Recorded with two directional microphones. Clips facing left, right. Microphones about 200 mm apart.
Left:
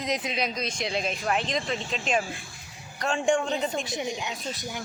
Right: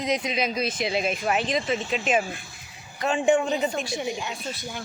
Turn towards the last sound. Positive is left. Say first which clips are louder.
# even
turn(degrees=15)  # may be behind; listen again after turning